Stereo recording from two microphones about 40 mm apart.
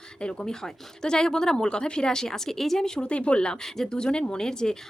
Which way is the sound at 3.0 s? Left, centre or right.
Left.